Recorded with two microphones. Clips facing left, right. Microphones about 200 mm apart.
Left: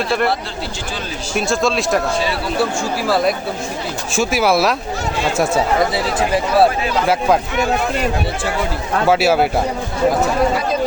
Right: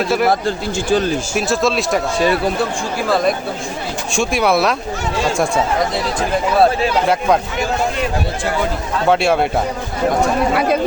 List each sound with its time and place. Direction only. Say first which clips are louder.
0.3 s speech: right 5 dB; 45° right (ahead or behind)
1.4 s speech: left 1 dB; centre (ahead or behind)
4.1 s speech: even; 5° left (ahead or behind)
5.9 s speech: left 1 dB; 5° left (ahead or behind)
9.0 s speech: even; 5° left (ahead or behind)